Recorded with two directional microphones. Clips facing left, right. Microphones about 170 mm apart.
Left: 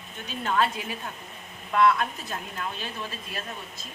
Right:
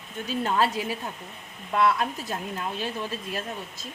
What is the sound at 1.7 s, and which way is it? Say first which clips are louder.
Speech: left 1 dB; 30° right (ahead or behind).